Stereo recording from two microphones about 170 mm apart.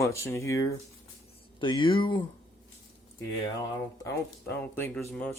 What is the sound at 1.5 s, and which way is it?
Speech, 30° left (ahead or behind).